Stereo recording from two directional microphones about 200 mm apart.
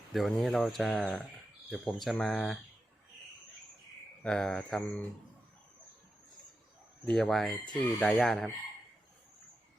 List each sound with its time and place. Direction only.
0.1 s speech: centre (ahead or behind)
4.2 s speech: 5° left (ahead or behind)
7.0 s speech: centre (ahead or behind)